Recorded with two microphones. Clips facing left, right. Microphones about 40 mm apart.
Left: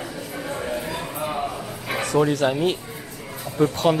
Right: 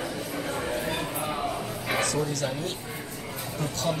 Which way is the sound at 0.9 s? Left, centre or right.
Centre.